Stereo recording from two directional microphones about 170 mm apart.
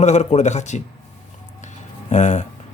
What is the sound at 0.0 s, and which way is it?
Speech, 40° left (ahead or behind).